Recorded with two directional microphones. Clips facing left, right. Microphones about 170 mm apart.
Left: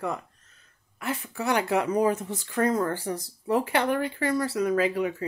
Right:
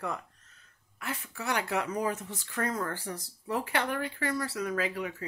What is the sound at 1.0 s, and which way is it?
Speech, 20° left (ahead or behind).